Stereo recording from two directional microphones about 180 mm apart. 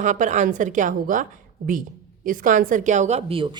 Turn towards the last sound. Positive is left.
turn(degrees=-30)  # may be behind; listen again after turning